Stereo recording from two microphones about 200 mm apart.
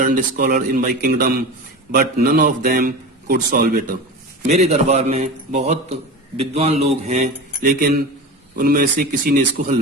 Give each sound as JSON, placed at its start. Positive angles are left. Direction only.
{"t": 0.0, "sound": "a man's voice", "side_deg": -45}
{"t": 4.4, "sound": "a man's voice", "side_deg": -35}